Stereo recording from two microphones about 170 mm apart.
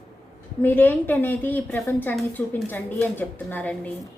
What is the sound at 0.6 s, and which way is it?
A woman's voice, 10° left (ahead or behind).